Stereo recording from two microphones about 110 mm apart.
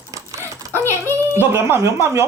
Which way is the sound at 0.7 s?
20° left (ahead or behind).